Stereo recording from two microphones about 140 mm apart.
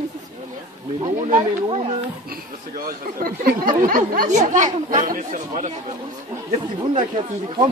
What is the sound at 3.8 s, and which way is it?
Speech, 75° right (ahead or behind).